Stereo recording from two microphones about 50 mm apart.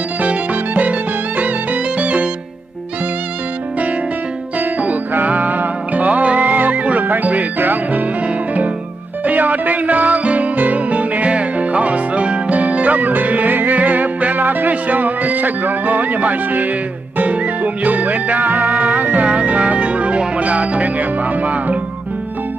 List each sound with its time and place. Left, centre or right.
0.2 s music: right
4.6 s music: right